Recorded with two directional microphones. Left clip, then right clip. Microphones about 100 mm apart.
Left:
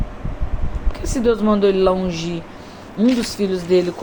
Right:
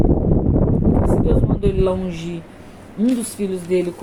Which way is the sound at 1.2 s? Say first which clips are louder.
Left 5 dB; 20° right (ahead or behind).